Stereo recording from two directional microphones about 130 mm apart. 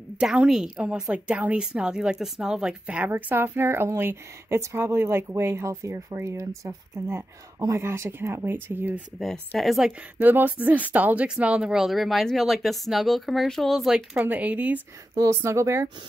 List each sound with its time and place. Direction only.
0.2 s a woman's voice: 5° right (ahead or behind)
9.6 s a woman's voice: centre (ahead or behind)
15.1 s speech: 20° right (ahead or behind)